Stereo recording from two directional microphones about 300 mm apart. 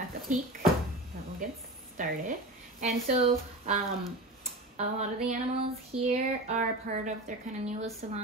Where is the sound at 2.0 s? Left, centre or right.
Right.